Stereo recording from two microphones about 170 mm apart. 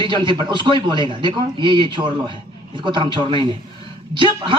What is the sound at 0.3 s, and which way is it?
A woman's voice, 30° right (ahead or behind).